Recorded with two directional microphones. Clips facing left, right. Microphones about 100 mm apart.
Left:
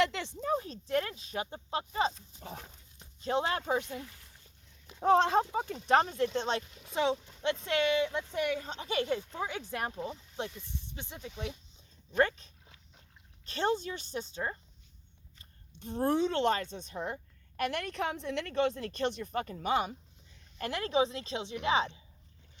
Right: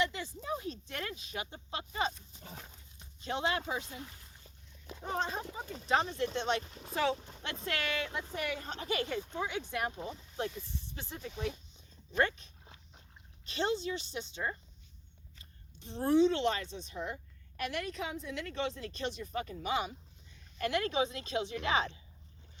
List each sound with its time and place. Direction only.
0.0 s a sound: 80° left
0.4 s speech: 35° left (ahead or behind)
3.8 s speech: 60° left (ahead or behind)
5.0 s speech: 85° left; by 5.7 s 65° left (ahead or behind)
5.9 s a woman's voice: 45° left (ahead or behind)
6.3 s a woman's voice: 35° left (ahead or behind)
6.6 s speech: 40° right (ahead or behind)
6.9 s a woman's voice: 25° left (ahead or behind)
10.9 s speech: 20° left (ahead or behind)
12.1 s a woman's voice: 35° left (ahead or behind)
12.6 s dog: 30° right (ahead or behind)
13.4 s a woman's voice: 45° left (ahead or behind)
15.8 s a woman's voice: 45° left (ahead or behind)
20.6 s a woman's voice: 35° left (ahead or behind)